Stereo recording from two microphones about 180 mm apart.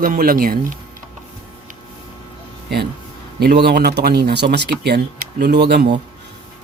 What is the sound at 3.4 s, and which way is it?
Speech, 65° right (ahead or behind).